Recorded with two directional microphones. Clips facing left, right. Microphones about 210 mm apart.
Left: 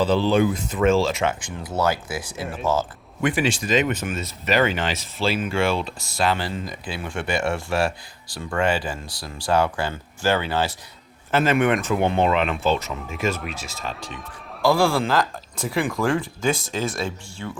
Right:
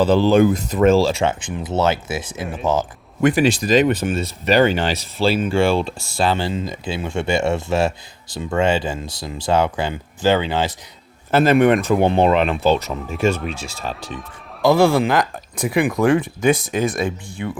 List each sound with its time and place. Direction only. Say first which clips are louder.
0.0 s speech: right 5 dB; 45° right (ahead or behind); by 2.4 s 20° right (ahead or behind)
2.4 s speech: right 2 dB; centre (ahead or behind)
3.2 s speech: right 6 dB; 40° right (ahead or behind); by 10.8 s 20° right (ahead or behind)
11.3 s speech: right 6 dB; 35° right (ahead or behind)
12.7 s speech: right 5 dB; centre (ahead or behind)
14.6 s speech: right 5 dB; 20° right (ahead or behind)